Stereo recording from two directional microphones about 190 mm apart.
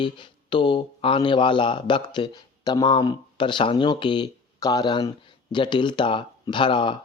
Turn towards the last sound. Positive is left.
turn(degrees=25)  # may be behind; listen again after turning